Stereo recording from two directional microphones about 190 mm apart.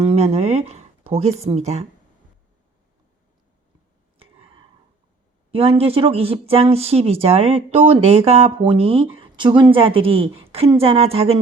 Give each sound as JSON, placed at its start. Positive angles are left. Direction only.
{"t": 0.0, "sound": "speech", "side_deg": -35}
{"t": 4.2, "sound": "a sound", "side_deg": -30}
{"t": 5.5, "sound": "speech", "side_deg": -30}